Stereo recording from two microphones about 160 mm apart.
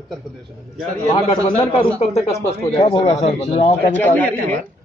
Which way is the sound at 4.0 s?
10° left (ahead or behind).